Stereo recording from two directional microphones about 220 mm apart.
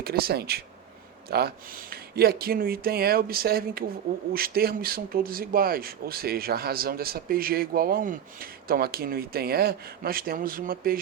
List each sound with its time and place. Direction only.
0.0 s speech: 45° right (ahead or behind)